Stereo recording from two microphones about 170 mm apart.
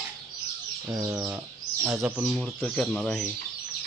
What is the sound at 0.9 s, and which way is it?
Chicken, 20° right (ahead or behind).